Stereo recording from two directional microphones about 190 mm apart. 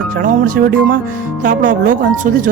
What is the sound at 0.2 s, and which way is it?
Speech, 45° right (ahead or behind).